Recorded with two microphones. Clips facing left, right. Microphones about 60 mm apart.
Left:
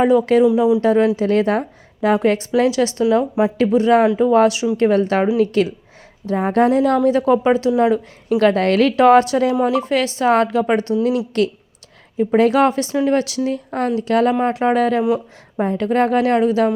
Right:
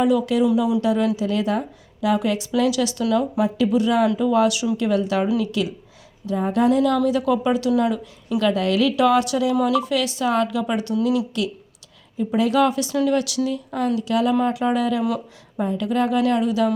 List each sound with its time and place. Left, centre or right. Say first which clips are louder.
0.0 s a woman's voice: left 5 dB; left
0.4 s speech: left 5 dB; left
0.8 s a woman's voice: left 5 dB; left
4.8 s a woman's voice: left 7 dB; left
12.1 s a woman's voice: left 5 dB; left